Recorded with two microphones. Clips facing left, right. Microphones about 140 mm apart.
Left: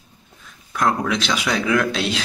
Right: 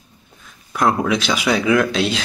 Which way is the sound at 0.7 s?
5° right (ahead or behind).